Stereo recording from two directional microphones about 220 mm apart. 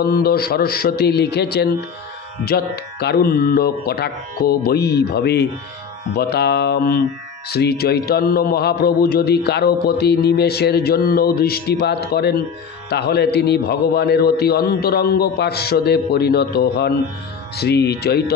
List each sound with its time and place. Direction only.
0.0 s mantra: 45° left (ahead or behind)